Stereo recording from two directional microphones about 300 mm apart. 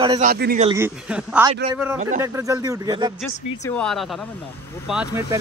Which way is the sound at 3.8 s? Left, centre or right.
Centre.